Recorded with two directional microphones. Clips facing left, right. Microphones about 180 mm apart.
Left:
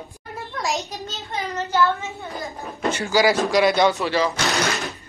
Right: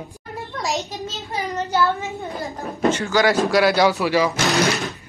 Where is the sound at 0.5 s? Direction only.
Centre (ahead or behind).